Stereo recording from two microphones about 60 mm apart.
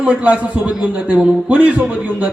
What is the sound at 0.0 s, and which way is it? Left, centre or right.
A man's voice, right.